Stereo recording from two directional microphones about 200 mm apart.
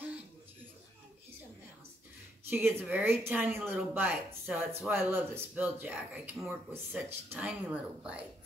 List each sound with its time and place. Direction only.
2.5 s speech: 10° right (ahead or behind)